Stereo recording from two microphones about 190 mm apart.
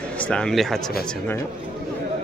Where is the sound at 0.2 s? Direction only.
5° left (ahead or behind).